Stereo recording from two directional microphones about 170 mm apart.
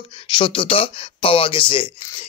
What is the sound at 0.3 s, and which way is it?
Speech, 30° left (ahead or behind).